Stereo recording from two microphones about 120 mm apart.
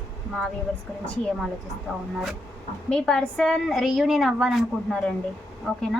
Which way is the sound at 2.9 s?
5° left (ahead or behind).